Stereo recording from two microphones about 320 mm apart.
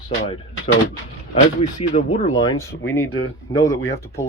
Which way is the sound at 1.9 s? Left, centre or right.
Left.